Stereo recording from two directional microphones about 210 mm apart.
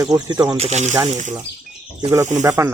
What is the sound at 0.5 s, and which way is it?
Speech, 30° right (ahead or behind).